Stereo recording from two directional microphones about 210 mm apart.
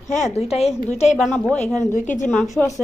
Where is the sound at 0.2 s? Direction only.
30° left (ahead or behind).